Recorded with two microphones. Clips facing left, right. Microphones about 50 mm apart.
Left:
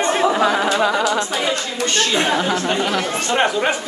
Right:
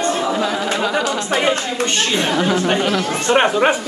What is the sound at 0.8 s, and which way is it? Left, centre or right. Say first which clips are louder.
Music: left 1 dB; centre.